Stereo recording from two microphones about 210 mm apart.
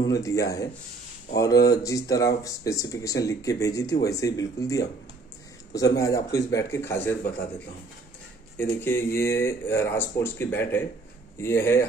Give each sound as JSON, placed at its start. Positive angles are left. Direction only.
{"t": 0.0, "sound": "speech", "side_deg": 15}
{"t": 8.5, "sound": "speech", "side_deg": 10}